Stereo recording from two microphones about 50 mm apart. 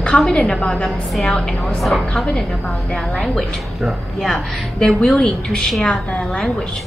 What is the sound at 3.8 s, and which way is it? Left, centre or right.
Speech, centre.